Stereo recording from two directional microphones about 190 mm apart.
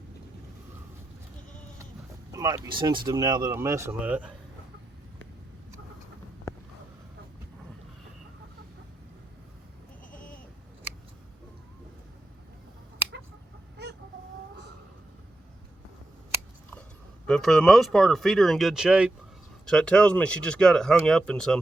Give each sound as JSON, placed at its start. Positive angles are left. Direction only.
{"t": 2.3, "sound": "vehicle", "side_deg": -20}
{"t": 2.6, "sound": "speech", "side_deg": -25}
{"t": 10.1, "sound": "sheep", "side_deg": 45}
{"t": 17.2, "sound": "speech", "side_deg": 5}